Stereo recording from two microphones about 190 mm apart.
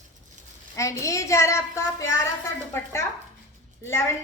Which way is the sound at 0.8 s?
15° left (ahead or behind).